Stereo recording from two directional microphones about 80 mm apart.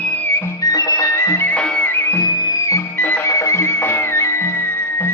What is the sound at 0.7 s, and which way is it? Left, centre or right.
Music, left.